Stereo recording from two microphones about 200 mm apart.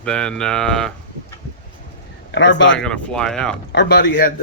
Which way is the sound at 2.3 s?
65° left (ahead or behind).